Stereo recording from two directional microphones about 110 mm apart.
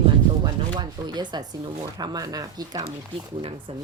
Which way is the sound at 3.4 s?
60° right (ahead or behind).